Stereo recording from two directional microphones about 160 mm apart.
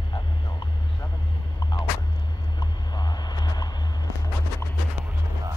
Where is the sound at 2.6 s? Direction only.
25° left (ahead or behind).